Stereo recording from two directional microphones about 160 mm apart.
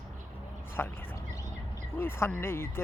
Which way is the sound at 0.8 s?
10° left (ahead or behind).